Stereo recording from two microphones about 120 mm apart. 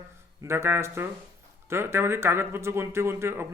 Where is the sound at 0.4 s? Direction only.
20° right (ahead or behind).